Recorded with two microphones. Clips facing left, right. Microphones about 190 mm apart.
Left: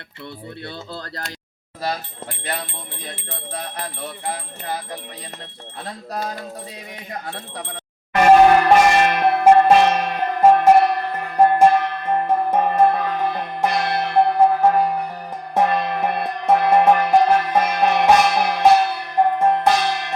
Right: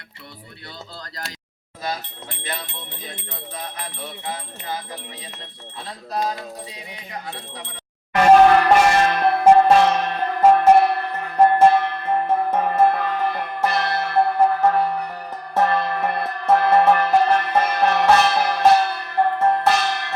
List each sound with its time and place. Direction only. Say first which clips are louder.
8.2 s music: left 1 dB; 15° left (ahead or behind)